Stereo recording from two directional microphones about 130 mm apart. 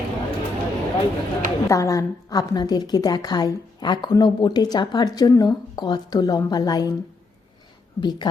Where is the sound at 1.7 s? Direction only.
25° left (ahead or behind).